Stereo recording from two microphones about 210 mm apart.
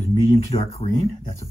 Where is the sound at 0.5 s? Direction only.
25° left (ahead or behind).